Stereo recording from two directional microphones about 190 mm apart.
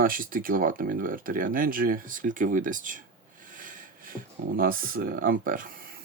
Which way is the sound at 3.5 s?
45° right (ahead or behind).